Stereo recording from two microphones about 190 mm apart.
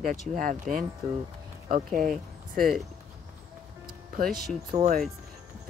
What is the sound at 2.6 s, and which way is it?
Speech, 50° right (ahead or behind).